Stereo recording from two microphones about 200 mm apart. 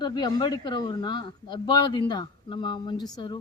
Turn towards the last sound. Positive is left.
turn(degrees=20)  # may be behind; listen again after turning